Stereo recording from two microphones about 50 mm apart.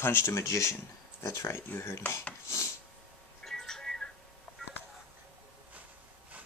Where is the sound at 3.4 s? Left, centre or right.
Centre.